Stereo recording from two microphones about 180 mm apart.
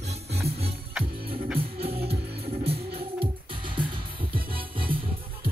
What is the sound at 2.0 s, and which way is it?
Music, 35° right (ahead or behind).